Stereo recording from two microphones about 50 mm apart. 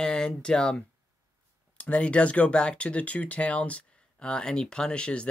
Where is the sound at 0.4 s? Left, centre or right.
Centre.